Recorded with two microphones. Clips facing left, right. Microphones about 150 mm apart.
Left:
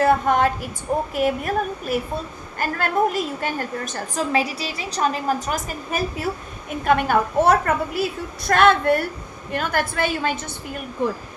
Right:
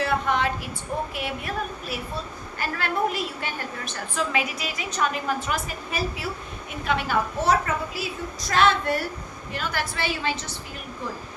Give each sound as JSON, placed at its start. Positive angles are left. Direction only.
{"t": 0.0, "sound": "a woman's voice", "side_deg": 45}